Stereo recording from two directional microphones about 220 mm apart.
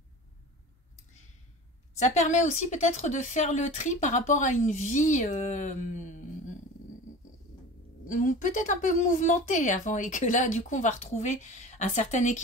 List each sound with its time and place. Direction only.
2.0 s speech: 30° left (ahead or behind)
8.1 s speech: 35° left (ahead or behind)